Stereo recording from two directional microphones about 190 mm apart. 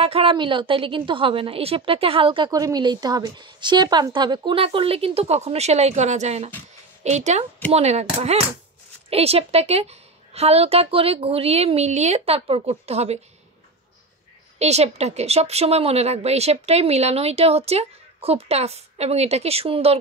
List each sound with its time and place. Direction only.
0.0 s a woman's voice: 30° right (ahead or behind)
14.6 s a woman's voice: 35° right (ahead or behind)